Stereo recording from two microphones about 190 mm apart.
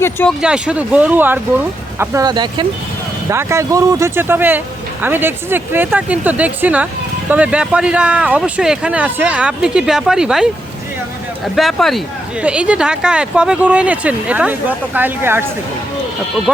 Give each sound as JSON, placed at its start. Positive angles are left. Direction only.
{"t": 0.0, "sound": "speech", "side_deg": 10}
{"t": 0.4, "sound": "speech", "side_deg": -5}
{"t": 11.5, "sound": "speech", "side_deg": 0}